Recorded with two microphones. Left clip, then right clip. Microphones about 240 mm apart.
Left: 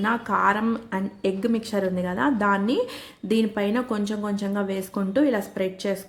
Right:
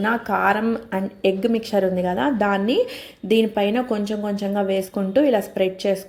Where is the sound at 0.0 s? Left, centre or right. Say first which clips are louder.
Right 2 dB; centre.